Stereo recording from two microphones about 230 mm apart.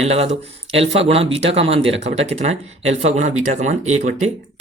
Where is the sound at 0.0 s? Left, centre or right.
Right.